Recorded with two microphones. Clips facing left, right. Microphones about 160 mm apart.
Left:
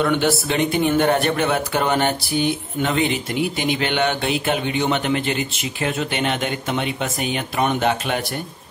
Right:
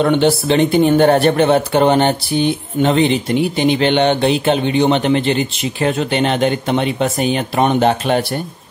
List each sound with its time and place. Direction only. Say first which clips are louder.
0.0 s speech: right 6 dB; 30° right (ahead or behind)